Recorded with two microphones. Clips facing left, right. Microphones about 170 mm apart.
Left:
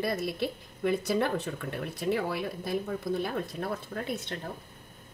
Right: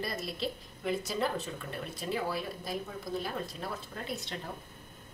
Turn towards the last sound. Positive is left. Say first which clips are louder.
# left 5 dB
turn(degrees=55)  # may be behind; listen again after turning